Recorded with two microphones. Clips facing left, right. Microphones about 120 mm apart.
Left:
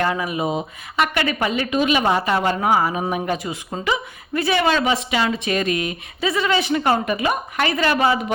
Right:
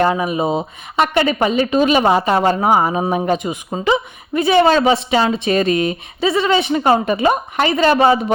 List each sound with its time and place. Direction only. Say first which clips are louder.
0.0 s speech: right 5 dB; 25° right (ahead or behind)